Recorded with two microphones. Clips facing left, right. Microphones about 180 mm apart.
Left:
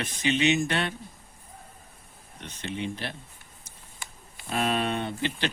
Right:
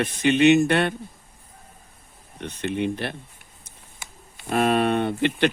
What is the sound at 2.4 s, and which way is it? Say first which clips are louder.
Speech: right 8 dB; 60° right (ahead or behind).